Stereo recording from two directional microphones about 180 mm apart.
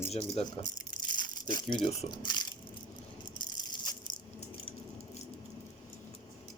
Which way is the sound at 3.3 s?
25° left (ahead or behind).